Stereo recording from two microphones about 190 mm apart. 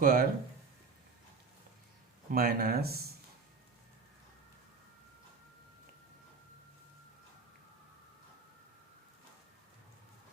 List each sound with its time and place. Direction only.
0.0 s speech: 50° right (ahead or behind)
2.3 s speech: 50° right (ahead or behind)